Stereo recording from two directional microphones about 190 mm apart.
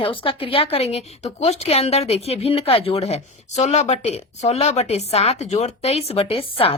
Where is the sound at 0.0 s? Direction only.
30° left (ahead or behind).